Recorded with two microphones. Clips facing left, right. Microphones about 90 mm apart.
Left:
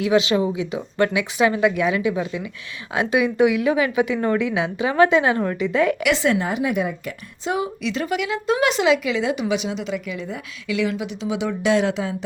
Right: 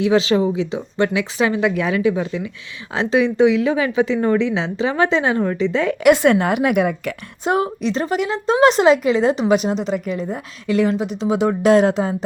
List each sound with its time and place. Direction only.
0.0 s a woman's voice: 30° right (ahead or behind)
1.7 s speech: 20° left (ahead or behind)
2.2 s a woman's voice: 30° right (ahead or behind)
6.0 s a woman's voice: 55° right (ahead or behind)